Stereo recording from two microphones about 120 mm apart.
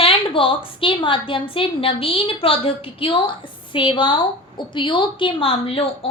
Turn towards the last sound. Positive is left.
turn(degrees=50)  # may be behind; listen again after turning